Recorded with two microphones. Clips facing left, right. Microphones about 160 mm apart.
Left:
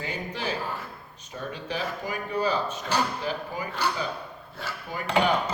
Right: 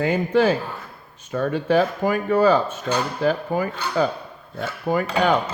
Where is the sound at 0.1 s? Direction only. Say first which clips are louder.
Right 13 dB; 50° right (ahead or behind).